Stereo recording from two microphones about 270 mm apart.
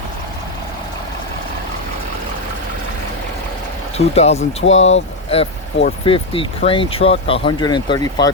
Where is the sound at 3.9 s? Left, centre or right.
Left.